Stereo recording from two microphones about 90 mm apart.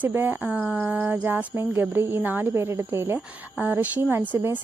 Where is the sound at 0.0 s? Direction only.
25° right (ahead or behind).